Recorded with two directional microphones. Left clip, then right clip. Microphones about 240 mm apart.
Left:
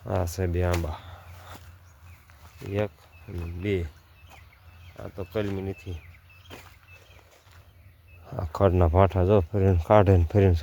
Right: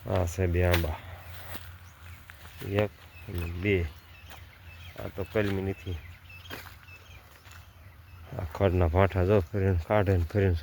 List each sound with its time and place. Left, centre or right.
0.2 s speech: centre
2.6 s speech: centre
3.6 s speech: centre
4.9 s speech: centre
6.5 s a sound: centre
8.4 s speech: left